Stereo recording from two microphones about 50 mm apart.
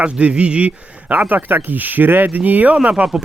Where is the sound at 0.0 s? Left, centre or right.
Right.